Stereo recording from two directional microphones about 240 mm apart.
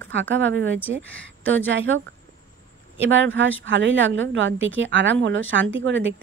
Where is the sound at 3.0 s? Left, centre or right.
Right.